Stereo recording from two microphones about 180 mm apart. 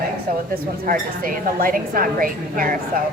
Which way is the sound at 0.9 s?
50° right (ahead or behind).